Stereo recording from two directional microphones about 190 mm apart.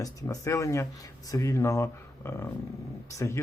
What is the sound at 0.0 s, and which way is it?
Speech, 20° left (ahead or behind).